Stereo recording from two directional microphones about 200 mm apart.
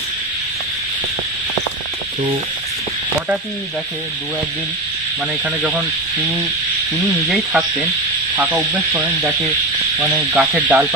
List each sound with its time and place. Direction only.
5.4 s sizzle: 5° right (ahead or behind)
7.2 s speech: centre (ahead or behind)
8.4 s sizzle: 5° right (ahead or behind)
10.0 s speech: centre (ahead or behind)